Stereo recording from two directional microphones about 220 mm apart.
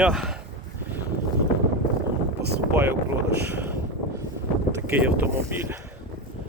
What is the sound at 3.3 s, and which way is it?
Speech, 50° right (ahead or behind).